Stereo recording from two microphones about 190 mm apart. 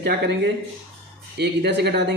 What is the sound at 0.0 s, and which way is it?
Speech, 65° right (ahead or behind).